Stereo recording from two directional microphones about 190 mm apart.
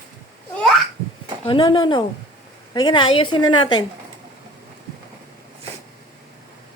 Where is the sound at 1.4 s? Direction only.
25° left (ahead or behind).